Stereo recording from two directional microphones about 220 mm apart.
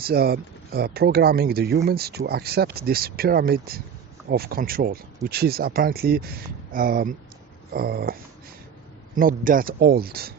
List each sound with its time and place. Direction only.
0.0 s speech: 45° right (ahead or behind)
9.1 s speech: 40° right (ahead or behind)